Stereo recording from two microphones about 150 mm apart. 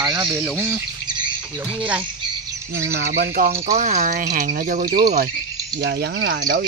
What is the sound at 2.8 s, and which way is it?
Speech, 90° right.